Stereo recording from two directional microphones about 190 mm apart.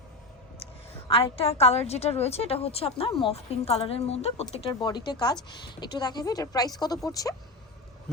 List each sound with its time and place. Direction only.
0.6 s a woman's voice: 30° left (ahead or behind)